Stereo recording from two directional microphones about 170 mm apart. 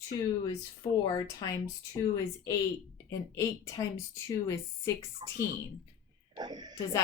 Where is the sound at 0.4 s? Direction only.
20° left (ahead or behind).